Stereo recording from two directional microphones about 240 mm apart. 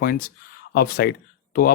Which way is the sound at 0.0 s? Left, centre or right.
Left.